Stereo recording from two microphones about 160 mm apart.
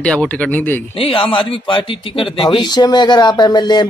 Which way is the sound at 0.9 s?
35° left (ahead or behind).